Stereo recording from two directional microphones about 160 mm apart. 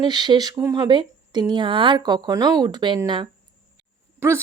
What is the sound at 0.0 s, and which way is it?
Speech, 25° right (ahead or behind).